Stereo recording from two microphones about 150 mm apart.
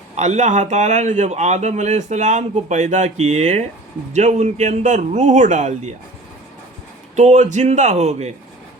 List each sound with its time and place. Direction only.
0.2 s a man's voice: 50° right (ahead or behind)
7.2 s a man's voice: 50° right (ahead or behind)